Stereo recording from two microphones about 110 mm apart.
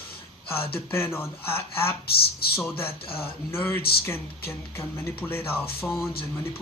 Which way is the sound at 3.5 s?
20° left (ahead or behind).